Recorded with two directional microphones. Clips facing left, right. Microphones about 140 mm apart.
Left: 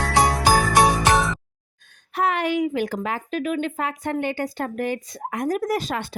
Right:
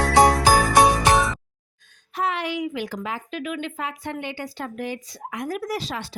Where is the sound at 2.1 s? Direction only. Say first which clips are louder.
Left 4 dB; 55° left (ahead or behind).